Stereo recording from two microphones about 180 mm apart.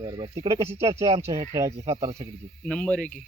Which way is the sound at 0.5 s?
30° right (ahead or behind).